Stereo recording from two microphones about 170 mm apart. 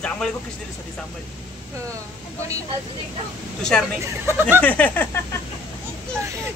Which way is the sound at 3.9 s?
15° right (ahead or behind).